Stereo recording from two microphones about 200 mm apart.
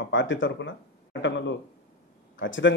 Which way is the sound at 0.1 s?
70° left (ahead or behind).